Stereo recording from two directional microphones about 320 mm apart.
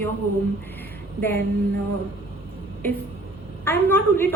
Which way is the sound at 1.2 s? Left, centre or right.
Centre.